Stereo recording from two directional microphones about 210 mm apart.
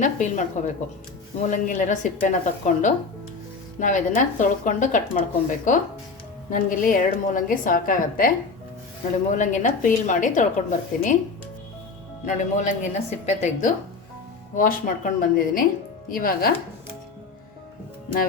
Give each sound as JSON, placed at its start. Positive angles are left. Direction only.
{"t": 0.0, "sound": "a woman's voice", "side_deg": 35}
{"t": 9.3, "sound": "a woman's voice", "side_deg": 35}
{"t": 12.2, "sound": "a woman's voice", "side_deg": 35}